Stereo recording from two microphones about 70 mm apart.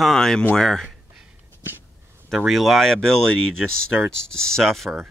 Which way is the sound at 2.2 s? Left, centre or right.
Centre.